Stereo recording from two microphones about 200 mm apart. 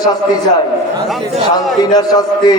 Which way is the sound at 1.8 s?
20° left (ahead or behind).